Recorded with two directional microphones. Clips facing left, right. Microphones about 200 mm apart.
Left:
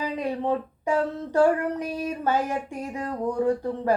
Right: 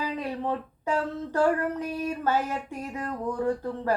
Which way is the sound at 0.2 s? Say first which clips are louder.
Left 4 dB; 15° left (ahead or behind).